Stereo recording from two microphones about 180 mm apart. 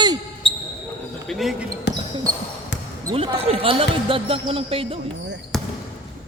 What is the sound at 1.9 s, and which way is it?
Speech, 70° left (ahead or behind).